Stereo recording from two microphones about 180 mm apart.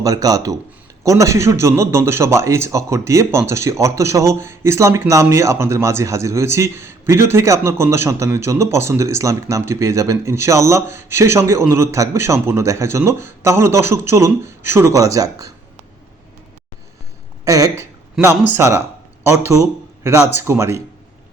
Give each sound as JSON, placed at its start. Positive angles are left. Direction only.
{"t": 0.0, "sound": "speech", "side_deg": -20}
{"t": 17.4, "sound": "speech", "side_deg": -20}